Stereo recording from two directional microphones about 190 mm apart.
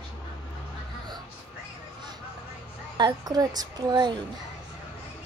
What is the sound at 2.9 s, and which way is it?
A child's voice, 20° right (ahead or behind).